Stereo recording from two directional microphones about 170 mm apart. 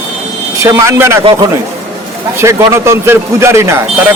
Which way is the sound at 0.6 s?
20° right (ahead or behind).